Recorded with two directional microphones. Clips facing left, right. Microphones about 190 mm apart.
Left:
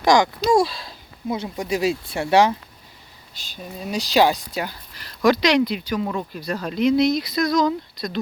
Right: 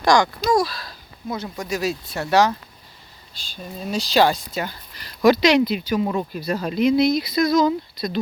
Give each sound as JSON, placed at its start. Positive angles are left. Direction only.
{"t": 0.0, "sound": "speech", "side_deg": 20}
{"t": 3.6, "sound": "speech", "side_deg": 5}
{"t": 4.7, "sound": "speech", "side_deg": 0}